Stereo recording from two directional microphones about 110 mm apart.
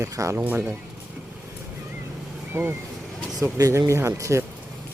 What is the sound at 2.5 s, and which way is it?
Speech, 20° right (ahead or behind).